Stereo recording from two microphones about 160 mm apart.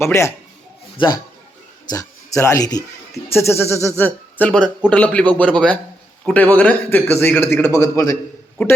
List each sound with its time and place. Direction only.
0.0 s a man's voice: 15° left (ahead or behind)